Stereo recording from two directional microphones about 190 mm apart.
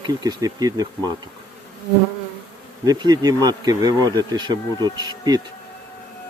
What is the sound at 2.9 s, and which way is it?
Speech, 20° right (ahead or behind).